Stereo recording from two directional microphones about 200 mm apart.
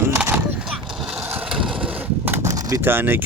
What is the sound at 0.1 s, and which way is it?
Skateboard, 10° right (ahead or behind).